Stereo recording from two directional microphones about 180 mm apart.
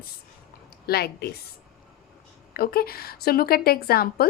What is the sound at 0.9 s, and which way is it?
A woman's voice, 60° left (ahead or behind).